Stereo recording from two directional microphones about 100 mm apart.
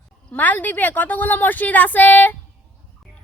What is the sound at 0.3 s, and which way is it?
A woman's voice, 15° left (ahead or behind).